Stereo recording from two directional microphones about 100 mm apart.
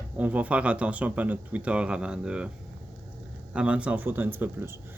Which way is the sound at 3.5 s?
10° right (ahead or behind).